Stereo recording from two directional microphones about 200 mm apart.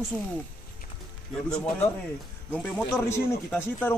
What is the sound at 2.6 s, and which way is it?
Speech, 5° right (ahead or behind).